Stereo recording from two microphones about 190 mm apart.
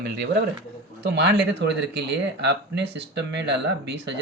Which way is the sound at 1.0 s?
65° right (ahead or behind).